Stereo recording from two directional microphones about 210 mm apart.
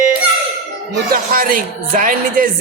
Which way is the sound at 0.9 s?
45° right (ahead or behind).